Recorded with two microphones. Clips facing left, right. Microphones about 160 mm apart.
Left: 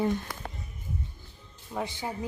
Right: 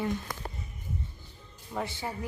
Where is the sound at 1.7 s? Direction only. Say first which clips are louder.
Left 1 dB; 15° left (ahead or behind).